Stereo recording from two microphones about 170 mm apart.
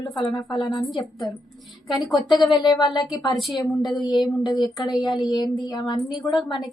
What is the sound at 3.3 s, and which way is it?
Speech, centre (ahead or behind).